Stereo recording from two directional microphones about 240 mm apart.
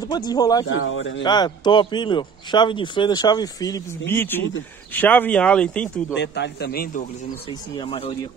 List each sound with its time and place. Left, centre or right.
0.1 s a man's voice: centre
0.7 s a man's voice: left
1.2 s a man's voice: centre
6.1 s a man's voice: left
7.7 s speech: left